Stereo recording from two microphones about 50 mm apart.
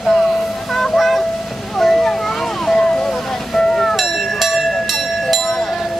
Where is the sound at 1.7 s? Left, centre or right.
Centre.